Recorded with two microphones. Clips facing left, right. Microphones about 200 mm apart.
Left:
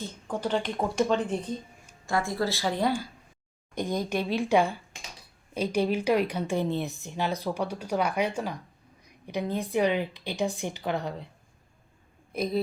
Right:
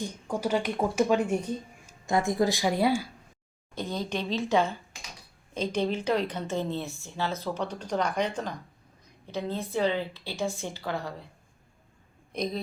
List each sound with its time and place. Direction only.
0.0 s speech: 10° right (ahead or behind)
3.8 s a woman's voice: 15° left (ahead or behind)
12.3 s speech: 5° left (ahead or behind)